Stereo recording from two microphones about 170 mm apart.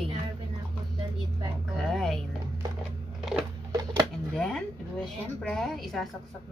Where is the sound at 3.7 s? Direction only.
25° right (ahead or behind).